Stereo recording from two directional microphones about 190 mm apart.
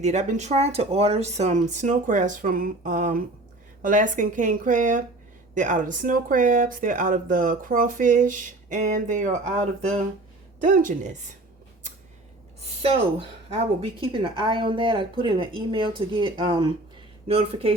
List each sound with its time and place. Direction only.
0.0 s speech: 40° right (ahead or behind)
10.6 s speech: 45° right (ahead or behind)
12.8 s speech: 30° right (ahead or behind)